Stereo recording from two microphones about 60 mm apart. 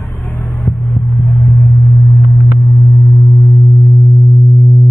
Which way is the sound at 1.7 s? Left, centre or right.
Left.